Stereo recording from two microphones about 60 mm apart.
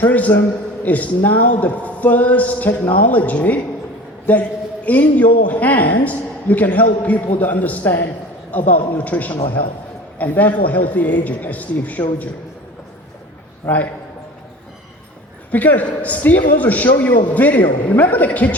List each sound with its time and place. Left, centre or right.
0.0 s a man's voice: left
13.7 s a man's voice: left
15.5 s a man's voice: left